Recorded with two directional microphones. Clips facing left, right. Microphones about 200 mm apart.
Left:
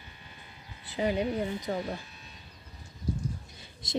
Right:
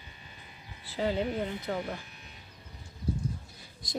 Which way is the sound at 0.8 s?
15° left (ahead or behind).